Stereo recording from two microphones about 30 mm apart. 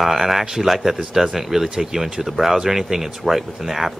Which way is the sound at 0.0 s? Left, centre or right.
Centre.